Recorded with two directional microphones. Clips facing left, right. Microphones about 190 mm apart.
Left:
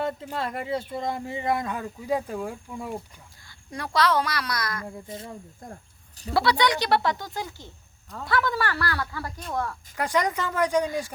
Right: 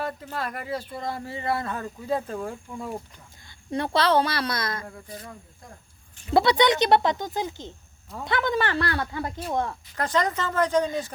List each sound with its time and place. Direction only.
0.0 s speech: 20° left (ahead or behind)
3.7 s speech: 25° right (ahead or behind)
4.9 s speech: 20° left (ahead or behind)
6.3 s speech: 20° right (ahead or behind)
9.9 s speech: 10° left (ahead or behind)